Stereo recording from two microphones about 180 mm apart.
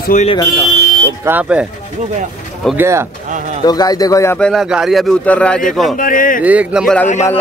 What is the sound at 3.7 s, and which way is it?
Speech, 20° left (ahead or behind).